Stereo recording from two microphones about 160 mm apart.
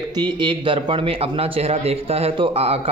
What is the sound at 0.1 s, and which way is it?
Speech, 25° right (ahead or behind).